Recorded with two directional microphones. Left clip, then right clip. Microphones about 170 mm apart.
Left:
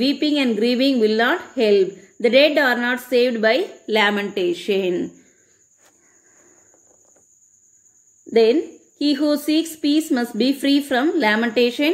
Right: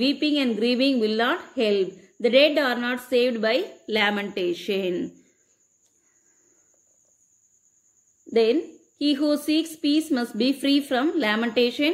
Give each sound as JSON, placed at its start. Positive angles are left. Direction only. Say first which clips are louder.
{"t": 0.0, "sound": "a woman's voice", "louder": "left 4 dB", "side_deg": 20}
{"t": 8.3, "sound": "a woman's voice", "louder": "left 5 dB", "side_deg": 15}